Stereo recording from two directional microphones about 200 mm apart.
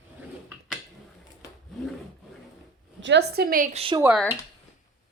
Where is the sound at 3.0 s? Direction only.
60° right (ahead or behind).